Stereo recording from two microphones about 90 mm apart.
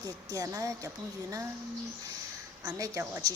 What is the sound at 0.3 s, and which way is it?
Speech, 40° right (ahead or behind).